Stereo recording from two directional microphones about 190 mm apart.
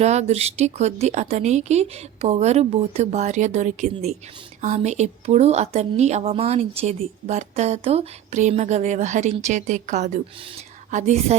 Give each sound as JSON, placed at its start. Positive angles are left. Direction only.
{"t": 0.0, "sound": "a woman's voice", "side_deg": -35}